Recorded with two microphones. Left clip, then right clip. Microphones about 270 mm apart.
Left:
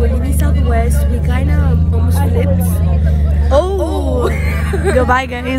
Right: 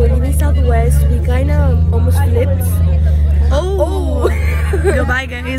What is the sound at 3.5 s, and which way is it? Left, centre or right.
Speech, centre.